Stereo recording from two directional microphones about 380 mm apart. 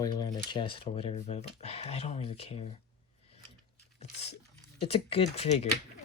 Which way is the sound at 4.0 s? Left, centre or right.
Centre.